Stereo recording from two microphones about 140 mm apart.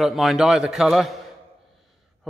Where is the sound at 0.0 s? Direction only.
Centre (ahead or behind).